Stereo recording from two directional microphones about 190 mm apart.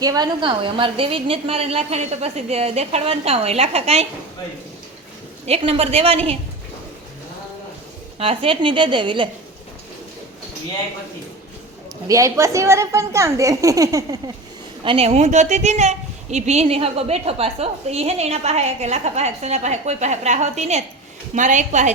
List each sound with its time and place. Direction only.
0.0 s a woman's voice: 20° right (ahead or behind)
5.5 s a woman's voice: 30° right (ahead or behind)
8.2 s a woman's voice: 30° right (ahead or behind)
12.0 s a woman's voice: 15° right (ahead or behind)
14.8 s a woman's voice: 30° right (ahead or behind)